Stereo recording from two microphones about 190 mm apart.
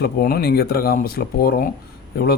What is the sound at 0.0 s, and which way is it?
A man's voice, 55° left (ahead or behind).